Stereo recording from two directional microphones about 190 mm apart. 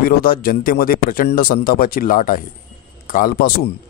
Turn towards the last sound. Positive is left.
turn(degrees=50)  # may be behind; listen again after turning